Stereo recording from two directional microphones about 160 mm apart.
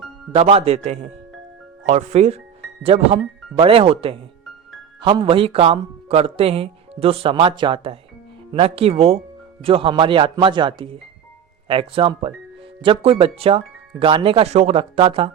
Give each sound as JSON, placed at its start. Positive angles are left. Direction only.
{"t": 0.3, "sound": "a man's voice", "side_deg": -35}